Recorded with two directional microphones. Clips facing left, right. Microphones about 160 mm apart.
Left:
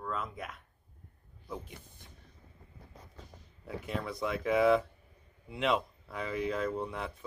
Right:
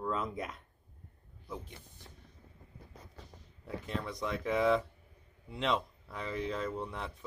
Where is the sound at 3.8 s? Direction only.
5° left (ahead or behind).